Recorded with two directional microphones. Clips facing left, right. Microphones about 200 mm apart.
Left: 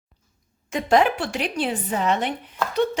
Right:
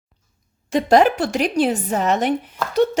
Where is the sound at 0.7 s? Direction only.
35° right (ahead or behind).